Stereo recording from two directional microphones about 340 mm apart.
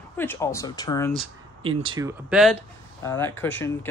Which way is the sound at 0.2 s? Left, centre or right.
Centre.